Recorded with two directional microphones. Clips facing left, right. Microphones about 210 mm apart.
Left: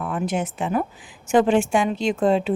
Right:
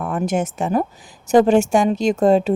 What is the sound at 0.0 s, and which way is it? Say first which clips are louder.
A woman's voice: right 4 dB; 45° right (ahead or behind).